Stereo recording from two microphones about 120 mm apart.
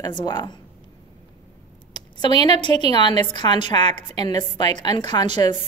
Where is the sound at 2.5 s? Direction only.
40° left (ahead or behind).